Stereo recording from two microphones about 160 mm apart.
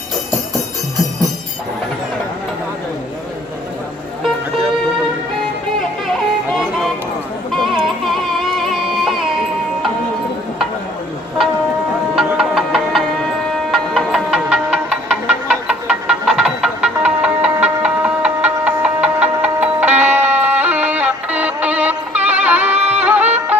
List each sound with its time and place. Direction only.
7.5 s music: centre (ahead or behind)
12.1 s music: 5° right (ahead or behind)